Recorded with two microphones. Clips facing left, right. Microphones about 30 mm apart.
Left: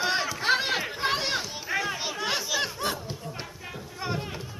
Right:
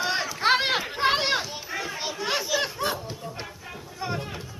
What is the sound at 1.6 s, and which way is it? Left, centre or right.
Children playing, centre.